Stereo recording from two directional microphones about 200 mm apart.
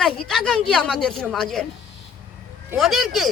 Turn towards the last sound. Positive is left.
turn(degrees=0)  # may be behind; listen again after turning